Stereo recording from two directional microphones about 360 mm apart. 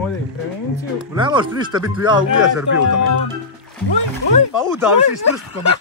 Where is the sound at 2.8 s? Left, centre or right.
Left.